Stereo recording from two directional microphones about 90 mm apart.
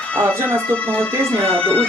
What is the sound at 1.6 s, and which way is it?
Music, 10° left (ahead or behind).